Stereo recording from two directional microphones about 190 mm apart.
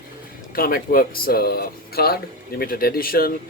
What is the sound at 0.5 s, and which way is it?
Speech, 50° left (ahead or behind).